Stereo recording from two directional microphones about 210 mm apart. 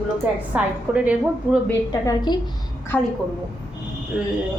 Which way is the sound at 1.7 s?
15° left (ahead or behind).